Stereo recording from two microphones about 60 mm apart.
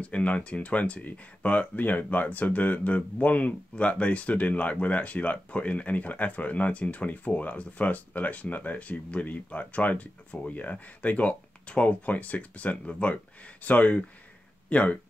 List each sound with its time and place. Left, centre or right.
0.0 s speech: left